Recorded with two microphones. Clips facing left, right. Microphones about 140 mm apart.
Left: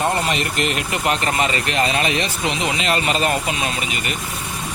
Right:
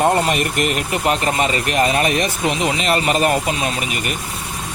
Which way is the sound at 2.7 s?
35° right (ahead or behind).